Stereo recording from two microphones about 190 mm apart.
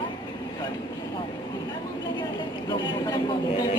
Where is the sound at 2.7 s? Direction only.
20° left (ahead or behind).